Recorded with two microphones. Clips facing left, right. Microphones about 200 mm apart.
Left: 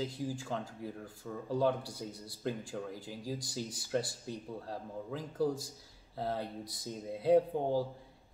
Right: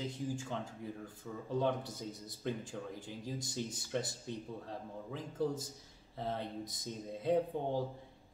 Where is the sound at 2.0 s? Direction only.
10° left (ahead or behind).